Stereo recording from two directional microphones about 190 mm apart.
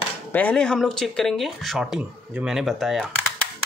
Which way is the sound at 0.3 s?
5° left (ahead or behind).